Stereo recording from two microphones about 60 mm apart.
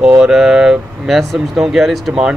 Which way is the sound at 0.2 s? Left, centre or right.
Centre.